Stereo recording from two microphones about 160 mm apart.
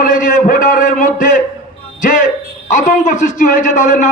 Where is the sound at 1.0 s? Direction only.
60° left (ahead or behind).